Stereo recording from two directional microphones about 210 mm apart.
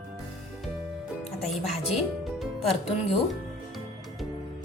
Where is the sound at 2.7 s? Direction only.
30° left (ahead or behind).